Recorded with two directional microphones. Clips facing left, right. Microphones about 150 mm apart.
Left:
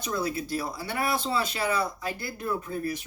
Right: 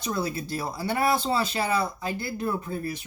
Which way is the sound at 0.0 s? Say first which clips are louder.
Right 1 dB; 30° right (ahead or behind).